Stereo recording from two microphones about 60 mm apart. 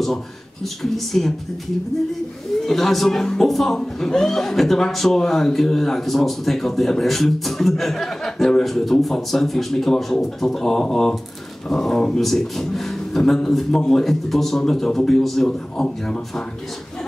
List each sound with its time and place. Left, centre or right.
0.8 s speech: centre
2.6 s a man's voice: centre